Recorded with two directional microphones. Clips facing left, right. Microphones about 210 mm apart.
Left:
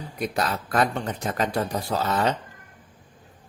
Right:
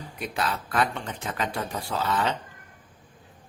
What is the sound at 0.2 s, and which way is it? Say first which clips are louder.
Speech: left 3 dB; 40° left (ahead or behind).